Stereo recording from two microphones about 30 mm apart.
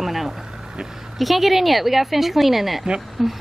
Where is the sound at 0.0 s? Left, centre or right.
Centre.